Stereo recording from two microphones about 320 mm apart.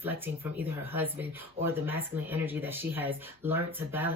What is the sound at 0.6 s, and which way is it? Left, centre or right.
Speech, centre.